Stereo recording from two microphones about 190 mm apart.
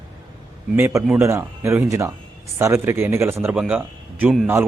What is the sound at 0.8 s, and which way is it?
Speech, 15° right (ahead or behind).